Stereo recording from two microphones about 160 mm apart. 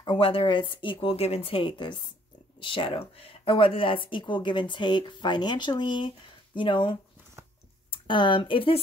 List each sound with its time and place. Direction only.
0.0 s speech: 35° left (ahead or behind)